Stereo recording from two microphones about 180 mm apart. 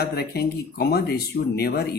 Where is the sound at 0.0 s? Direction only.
60° left (ahead or behind).